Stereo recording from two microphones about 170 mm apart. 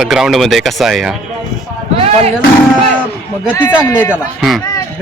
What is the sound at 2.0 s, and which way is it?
Music, 40° right (ahead or behind).